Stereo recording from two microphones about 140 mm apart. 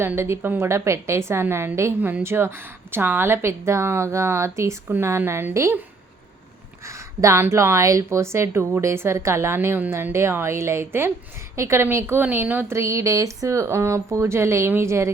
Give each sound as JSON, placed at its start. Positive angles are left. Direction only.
{"t": 0.0, "sound": "a woman's voice", "side_deg": -20}
{"t": 6.8, "sound": "speech", "side_deg": -20}